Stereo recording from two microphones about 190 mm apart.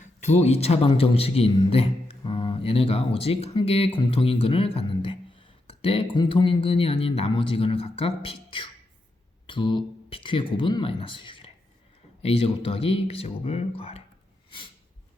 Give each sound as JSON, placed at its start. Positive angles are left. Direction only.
{"t": 0.2, "sound": "a man's voice", "side_deg": 35}